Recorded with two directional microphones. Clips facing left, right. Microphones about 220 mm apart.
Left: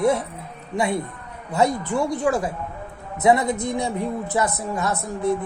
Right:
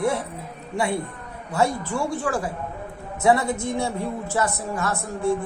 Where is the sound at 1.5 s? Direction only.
20° left (ahead or behind).